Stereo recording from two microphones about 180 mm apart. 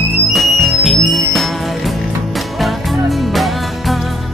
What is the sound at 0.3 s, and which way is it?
Music, centre (ahead or behind).